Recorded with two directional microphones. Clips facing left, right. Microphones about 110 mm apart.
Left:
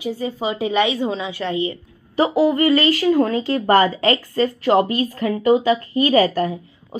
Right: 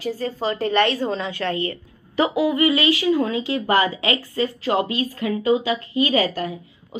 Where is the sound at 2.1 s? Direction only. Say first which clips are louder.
Left 3 dB; 35° left (ahead or behind).